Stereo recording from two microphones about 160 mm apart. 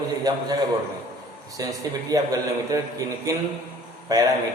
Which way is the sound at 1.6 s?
20° right (ahead or behind).